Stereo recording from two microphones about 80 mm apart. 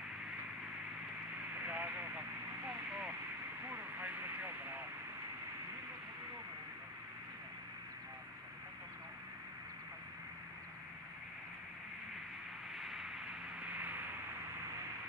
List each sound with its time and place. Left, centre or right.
1.5 s vehicle: right
3.6 s speech: right
12.7 s a sound: centre
13.6 s vehicle: centre